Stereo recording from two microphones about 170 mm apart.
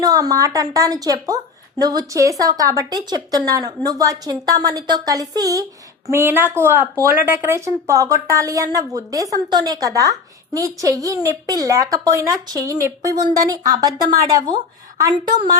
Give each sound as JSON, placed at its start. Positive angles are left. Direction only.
{"t": 0.0, "sound": "speech", "side_deg": -20}